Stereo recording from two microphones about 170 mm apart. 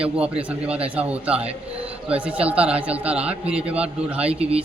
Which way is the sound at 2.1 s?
5° right (ahead or behind).